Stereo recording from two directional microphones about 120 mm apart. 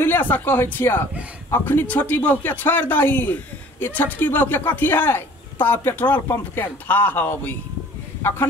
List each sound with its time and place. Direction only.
0.0 s speech: 15° left (ahead or behind)